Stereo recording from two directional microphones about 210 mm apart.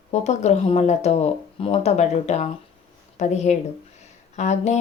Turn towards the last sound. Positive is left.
turn(degrees=30)  # may be behind; listen again after turning